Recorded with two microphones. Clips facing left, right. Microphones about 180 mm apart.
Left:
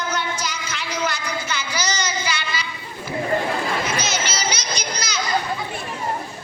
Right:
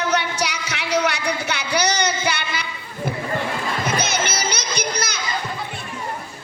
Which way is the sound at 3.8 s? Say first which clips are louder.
Right 2 dB; 55° right (ahead or behind).